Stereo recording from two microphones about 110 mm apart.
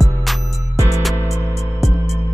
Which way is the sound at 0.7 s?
30° right (ahead or behind).